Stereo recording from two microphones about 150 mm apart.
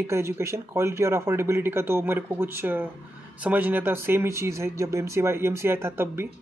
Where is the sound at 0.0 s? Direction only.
15° right (ahead or behind).